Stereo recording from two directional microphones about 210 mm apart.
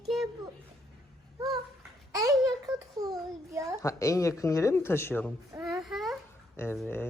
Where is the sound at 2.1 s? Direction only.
15° right (ahead or behind).